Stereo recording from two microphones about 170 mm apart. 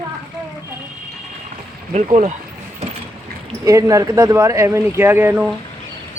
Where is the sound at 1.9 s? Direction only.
40° right (ahead or behind).